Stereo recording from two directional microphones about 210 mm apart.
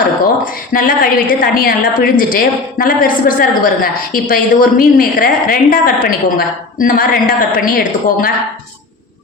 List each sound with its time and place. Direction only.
0.4 s a woman's voice: 40° left (ahead or behind)